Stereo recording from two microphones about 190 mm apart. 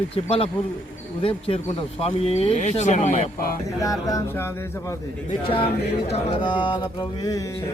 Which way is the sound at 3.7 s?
20° left (ahead or behind).